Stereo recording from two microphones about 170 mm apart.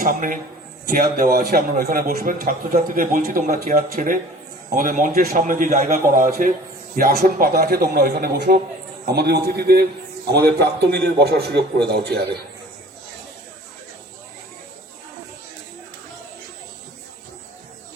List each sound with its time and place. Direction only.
0.0 s a man's voice: 55° right (ahead or behind); by 12.3 s 70° right (ahead or behind)